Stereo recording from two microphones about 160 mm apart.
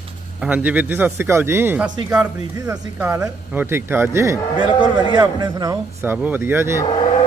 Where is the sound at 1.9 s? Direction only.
25° right (ahead or behind).